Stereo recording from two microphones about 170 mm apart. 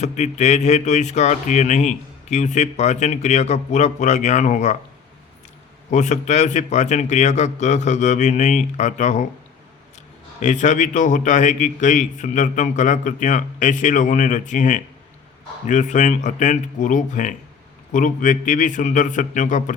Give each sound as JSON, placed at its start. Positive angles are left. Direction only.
{"t": 0.0, "sound": "speech", "side_deg": 40}
{"t": 5.9, "sound": "speech", "side_deg": 45}
{"t": 10.4, "sound": "speech", "side_deg": 45}